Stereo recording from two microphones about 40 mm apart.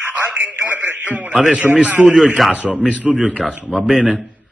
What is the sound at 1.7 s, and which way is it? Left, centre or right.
Speech, right.